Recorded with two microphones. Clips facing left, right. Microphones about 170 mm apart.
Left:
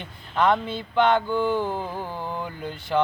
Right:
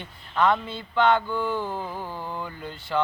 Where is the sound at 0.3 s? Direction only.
20° left (ahead or behind).